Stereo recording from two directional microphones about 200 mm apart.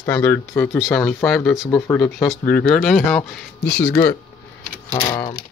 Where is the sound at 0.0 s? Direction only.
10° left (ahead or behind).